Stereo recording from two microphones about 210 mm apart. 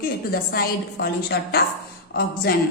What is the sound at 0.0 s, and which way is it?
A woman's voice, 45° left (ahead or behind).